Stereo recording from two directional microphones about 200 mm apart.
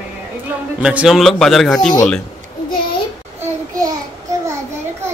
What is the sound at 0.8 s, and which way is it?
Speech, 5° right (ahead or behind).